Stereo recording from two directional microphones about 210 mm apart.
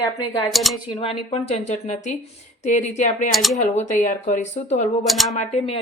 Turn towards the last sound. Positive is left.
turn(degrees=30)  # may be behind; listen again after turning